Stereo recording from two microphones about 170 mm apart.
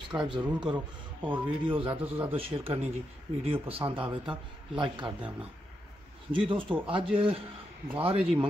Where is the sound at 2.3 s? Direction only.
35° right (ahead or behind).